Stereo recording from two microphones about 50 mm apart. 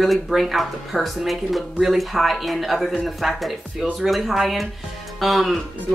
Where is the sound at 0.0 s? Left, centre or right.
Centre.